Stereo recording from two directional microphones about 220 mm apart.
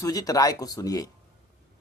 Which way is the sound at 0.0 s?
15° left (ahead or behind).